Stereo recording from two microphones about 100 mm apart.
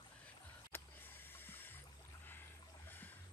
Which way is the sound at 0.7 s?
20° left (ahead or behind).